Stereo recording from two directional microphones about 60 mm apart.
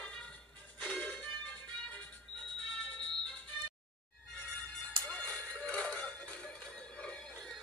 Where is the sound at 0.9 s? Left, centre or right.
Centre.